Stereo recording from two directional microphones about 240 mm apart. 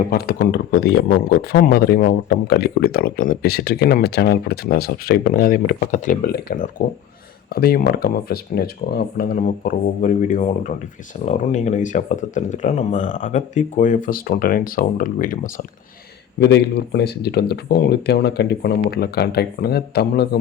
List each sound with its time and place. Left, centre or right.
0.1 s speech: left
16.4 s speech: left